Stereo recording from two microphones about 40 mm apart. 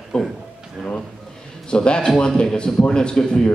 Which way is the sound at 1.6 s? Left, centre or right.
Left.